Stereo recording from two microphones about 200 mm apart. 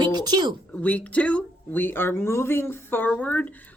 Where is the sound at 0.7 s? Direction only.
5° left (ahead or behind).